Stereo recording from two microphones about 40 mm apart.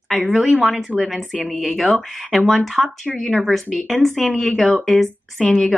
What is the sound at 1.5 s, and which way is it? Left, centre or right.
Speech, left.